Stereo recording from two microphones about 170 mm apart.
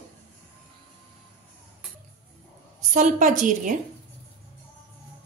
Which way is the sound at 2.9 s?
45° right (ahead or behind).